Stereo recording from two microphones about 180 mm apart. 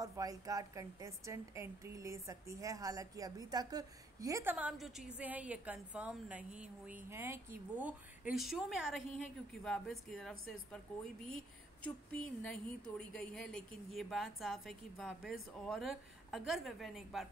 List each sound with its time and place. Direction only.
0.0 s a woman's voice: 20° right (ahead or behind); by 17.3 s centre (ahead or behind)